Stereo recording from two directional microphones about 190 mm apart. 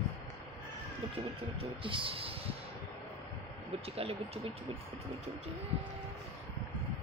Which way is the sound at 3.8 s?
30° right (ahead or behind).